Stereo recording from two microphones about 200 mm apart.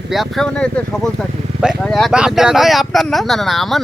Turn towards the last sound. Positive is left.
turn(degrees=0)  # may be behind; listen again after turning